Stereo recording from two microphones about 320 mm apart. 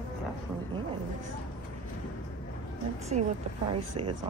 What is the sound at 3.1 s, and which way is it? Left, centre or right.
Speech, right.